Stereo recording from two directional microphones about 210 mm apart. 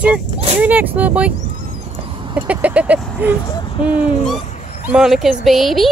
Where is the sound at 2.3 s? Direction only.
5° right (ahead or behind).